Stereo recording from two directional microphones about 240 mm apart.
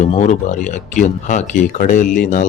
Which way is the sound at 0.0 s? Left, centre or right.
Left.